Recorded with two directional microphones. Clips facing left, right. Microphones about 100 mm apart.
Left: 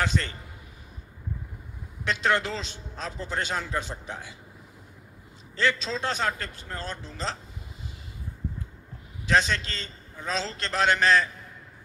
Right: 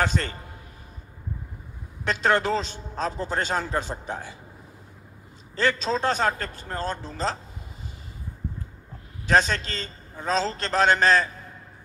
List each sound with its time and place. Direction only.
0.0 s a man's voice: 40° right (ahead or behind)
2.0 s a man's voice: 40° right (ahead or behind)
5.6 s a man's voice: 40° right (ahead or behind)
9.2 s a man's voice: 40° right (ahead or behind)